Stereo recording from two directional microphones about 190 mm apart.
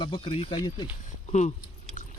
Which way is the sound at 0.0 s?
25° left (ahead or behind).